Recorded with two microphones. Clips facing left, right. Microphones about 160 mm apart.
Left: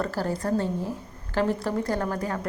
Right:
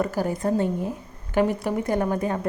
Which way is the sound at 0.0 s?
15° right (ahead or behind).